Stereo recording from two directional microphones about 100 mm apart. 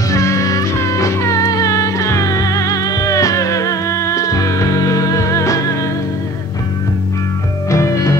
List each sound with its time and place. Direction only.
0.1 s music: 30° left (ahead or behind)
7.7 s music: 30° left (ahead or behind)